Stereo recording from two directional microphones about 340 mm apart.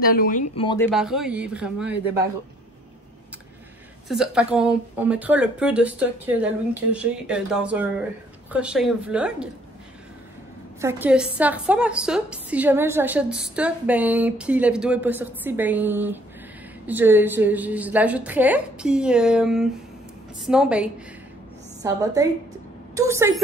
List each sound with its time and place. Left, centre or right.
0.0 s speech: left
0.8 s a woman's voice: centre
4.1 s a woman's voice: centre
10.8 s a woman's voice: centre